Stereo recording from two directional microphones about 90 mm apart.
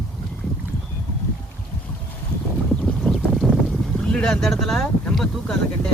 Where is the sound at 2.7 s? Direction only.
5° left (ahead or behind).